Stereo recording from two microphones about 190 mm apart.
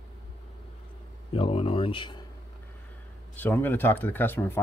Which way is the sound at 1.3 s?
30° left (ahead or behind).